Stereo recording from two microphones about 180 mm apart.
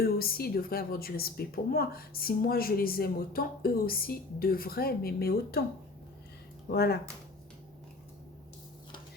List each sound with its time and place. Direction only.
0.0 s speech: 55° left (ahead or behind)
6.7 s speech: 60° left (ahead or behind)